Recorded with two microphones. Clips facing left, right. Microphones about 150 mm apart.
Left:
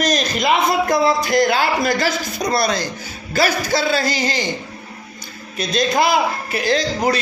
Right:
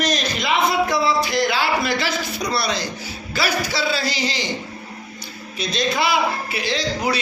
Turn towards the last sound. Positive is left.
turn(degrees=45)  # may be behind; listen again after turning